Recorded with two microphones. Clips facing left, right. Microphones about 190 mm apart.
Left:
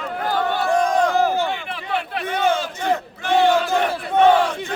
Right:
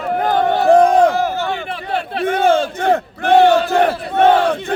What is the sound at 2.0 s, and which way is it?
Speech, 30° right (ahead or behind).